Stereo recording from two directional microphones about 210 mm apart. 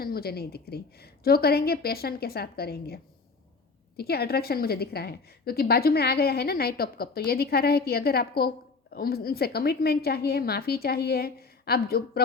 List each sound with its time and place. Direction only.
0.0 s a woman's voice: 45° left (ahead or behind)